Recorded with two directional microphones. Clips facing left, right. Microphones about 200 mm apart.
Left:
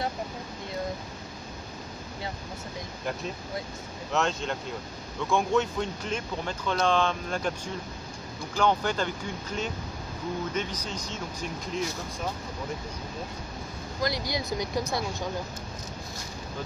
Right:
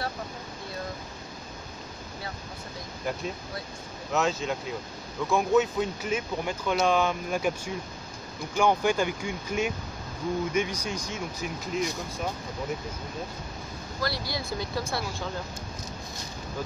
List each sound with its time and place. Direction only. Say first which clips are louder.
4.1 s speech: right 1 dB; centre (ahead or behind)
14.0 s speech: left 2 dB; 20° left (ahead or behind)